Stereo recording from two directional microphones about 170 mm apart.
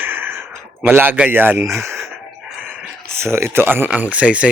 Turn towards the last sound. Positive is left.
turn(degrees=-10)  # may be behind; listen again after turning